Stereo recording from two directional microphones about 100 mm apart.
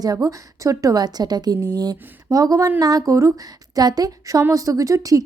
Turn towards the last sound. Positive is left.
turn(degrees=-35)  # may be behind; listen again after turning